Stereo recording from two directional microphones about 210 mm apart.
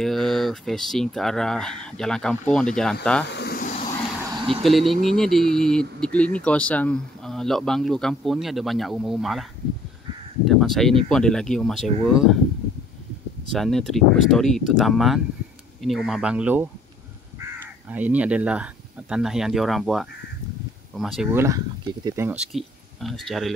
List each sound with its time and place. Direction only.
0.0 s speech: centre (ahead or behind)
3.3 s snake: 50° left (ahead or behind); by 3.9 s 35° left (ahead or behind)
4.6 s speech: centre (ahead or behind)
10.4 s crow: centre (ahead or behind)
11.1 s speech: 5° left (ahead or behind)
13.5 s speech: centre (ahead or behind)
21.3 s speech: 10° right (ahead or behind)